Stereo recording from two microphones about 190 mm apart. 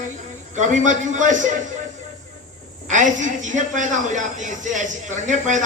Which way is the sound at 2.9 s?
40° right (ahead or behind).